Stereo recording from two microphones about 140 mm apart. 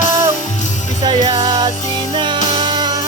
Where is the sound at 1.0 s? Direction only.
35° right (ahead or behind).